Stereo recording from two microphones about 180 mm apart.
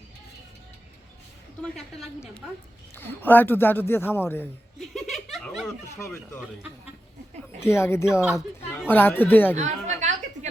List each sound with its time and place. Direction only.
2.9 s a man's voice: 10° left (ahead or behind)
4.8 s a sound: centre (ahead or behind)
7.6 s a man's voice: 15° left (ahead or behind)
8.2 s speech: 5° right (ahead or behind)
8.9 s a man's voice: 10° left (ahead or behind)
9.6 s a sound: 40° right (ahead or behind)